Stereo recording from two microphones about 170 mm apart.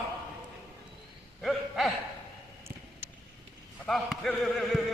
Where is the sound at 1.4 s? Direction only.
Centre (ahead or behind).